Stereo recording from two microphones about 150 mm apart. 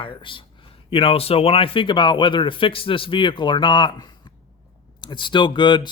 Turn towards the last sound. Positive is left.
turn(degrees=30)  # may be behind; listen again after turning